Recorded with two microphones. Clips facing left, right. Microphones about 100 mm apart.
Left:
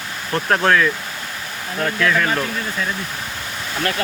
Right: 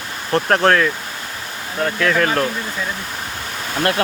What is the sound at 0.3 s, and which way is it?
Speech, 30° right (ahead or behind).